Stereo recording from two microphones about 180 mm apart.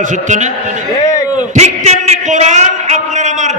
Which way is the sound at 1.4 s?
40° right (ahead or behind).